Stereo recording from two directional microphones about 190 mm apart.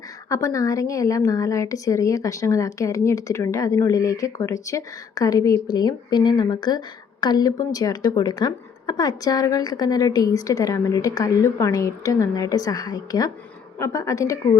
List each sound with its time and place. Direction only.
0.3 s a woman's voice: 15° left (ahead or behind)